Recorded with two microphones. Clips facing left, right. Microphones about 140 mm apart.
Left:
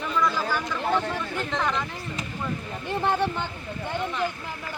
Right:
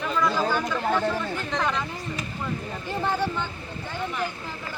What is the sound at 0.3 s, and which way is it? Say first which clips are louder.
Chatter: right 3 dB; 20° right (ahead or behind).